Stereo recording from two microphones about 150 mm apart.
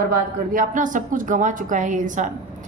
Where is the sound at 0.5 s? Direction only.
65° right (ahead or behind).